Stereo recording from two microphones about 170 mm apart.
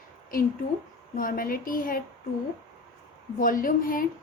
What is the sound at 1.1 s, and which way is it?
Speech, 55° left (ahead or behind).